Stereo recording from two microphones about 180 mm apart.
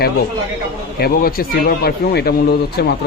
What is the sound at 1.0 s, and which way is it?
Speech, 55° left (ahead or behind).